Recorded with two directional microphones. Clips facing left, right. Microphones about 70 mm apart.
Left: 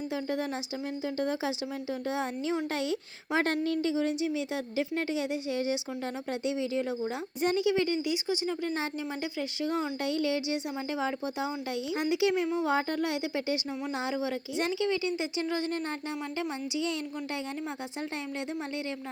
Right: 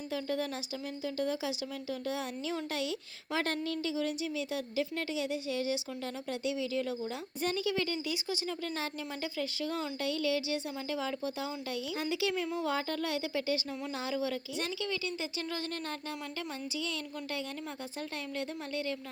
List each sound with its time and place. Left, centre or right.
0.1 s a woman's voice: left